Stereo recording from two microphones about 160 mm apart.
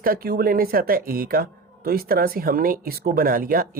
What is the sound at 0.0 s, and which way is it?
Speech, 65° right (ahead or behind).